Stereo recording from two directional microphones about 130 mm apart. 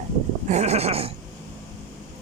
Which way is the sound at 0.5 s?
55° right (ahead or behind).